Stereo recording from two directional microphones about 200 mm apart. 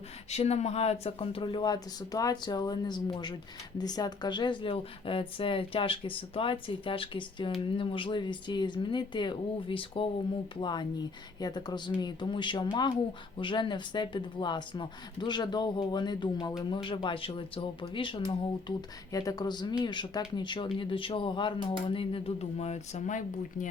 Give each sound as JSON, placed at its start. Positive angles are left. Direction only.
{"t": 0.3, "sound": "speech", "side_deg": 35}